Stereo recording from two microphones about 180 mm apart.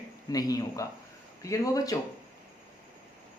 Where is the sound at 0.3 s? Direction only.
20° left (ahead or behind).